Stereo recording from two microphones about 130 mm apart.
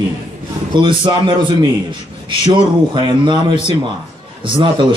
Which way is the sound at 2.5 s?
35° right (ahead or behind).